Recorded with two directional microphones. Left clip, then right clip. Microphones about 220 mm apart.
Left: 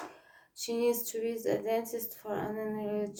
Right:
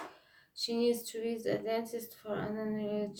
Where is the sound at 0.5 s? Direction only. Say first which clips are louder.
Left 1 dB; centre (ahead or behind).